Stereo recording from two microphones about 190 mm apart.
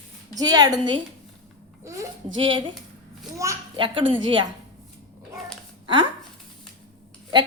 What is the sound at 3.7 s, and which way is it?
Speech, 25° right (ahead or behind).